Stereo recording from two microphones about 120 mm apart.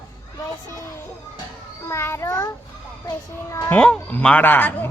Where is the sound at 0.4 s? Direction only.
20° left (ahead or behind).